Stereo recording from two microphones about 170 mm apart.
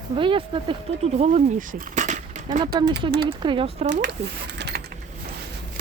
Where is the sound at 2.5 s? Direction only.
65° right (ahead or behind).